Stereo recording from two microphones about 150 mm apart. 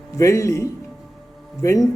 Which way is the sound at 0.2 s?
20° left (ahead or behind).